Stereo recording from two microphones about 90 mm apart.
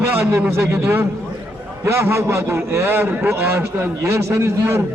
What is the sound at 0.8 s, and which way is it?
A man's voice, 25° right (ahead or behind).